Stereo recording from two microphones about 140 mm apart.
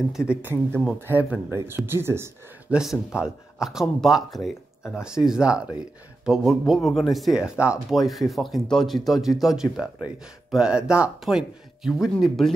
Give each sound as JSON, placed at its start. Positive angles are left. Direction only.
{"t": 0.1, "sound": "speech", "side_deg": -5}
{"t": 2.7, "sound": "speech", "side_deg": -5}